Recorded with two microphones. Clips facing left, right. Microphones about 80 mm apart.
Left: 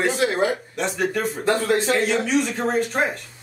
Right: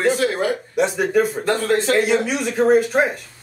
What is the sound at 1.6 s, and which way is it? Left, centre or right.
Speech, centre.